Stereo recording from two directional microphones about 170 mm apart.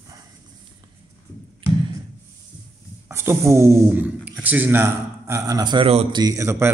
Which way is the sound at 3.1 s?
15° right (ahead or behind).